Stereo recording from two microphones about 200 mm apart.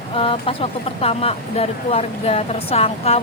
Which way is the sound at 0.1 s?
25° left (ahead or behind).